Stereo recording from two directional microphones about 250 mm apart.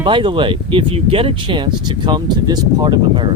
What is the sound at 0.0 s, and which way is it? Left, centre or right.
Speech, centre.